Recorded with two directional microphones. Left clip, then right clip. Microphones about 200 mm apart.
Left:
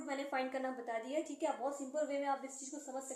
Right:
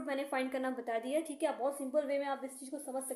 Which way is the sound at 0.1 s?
50° right (ahead or behind).